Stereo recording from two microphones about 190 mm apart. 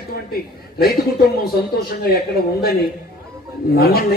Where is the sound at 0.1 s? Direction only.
55° left (ahead or behind).